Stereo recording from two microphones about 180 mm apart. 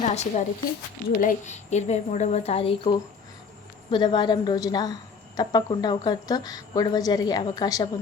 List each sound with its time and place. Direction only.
0.0 s a woman's voice: 40° left (ahead or behind); by 7.9 s 20° left (ahead or behind)